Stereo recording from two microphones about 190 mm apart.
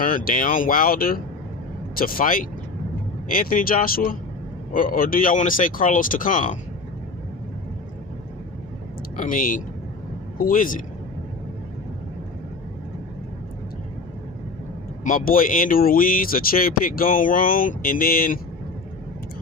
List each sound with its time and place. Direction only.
0.0 s speech: 45° left (ahead or behind)
9.1 s a man's voice: 45° left (ahead or behind)
15.0 s speech: 45° left (ahead or behind)